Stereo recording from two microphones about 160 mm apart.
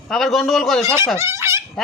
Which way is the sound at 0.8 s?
15° right (ahead or behind).